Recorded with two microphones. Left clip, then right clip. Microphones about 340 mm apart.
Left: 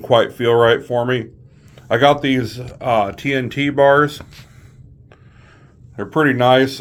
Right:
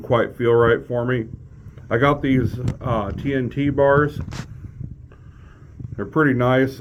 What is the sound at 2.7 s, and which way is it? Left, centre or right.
Speech, left.